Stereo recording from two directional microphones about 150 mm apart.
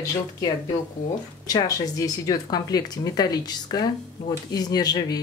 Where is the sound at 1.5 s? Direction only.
25° left (ahead or behind).